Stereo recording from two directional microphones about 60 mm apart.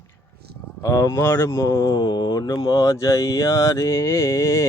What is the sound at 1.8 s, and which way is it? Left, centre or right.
Mantra, left.